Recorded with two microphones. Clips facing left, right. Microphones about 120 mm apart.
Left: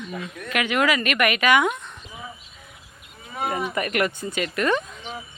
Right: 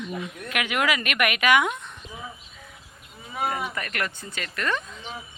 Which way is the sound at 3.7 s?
15° left (ahead or behind).